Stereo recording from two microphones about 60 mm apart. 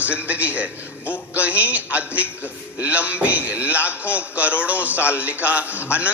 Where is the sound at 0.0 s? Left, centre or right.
Right.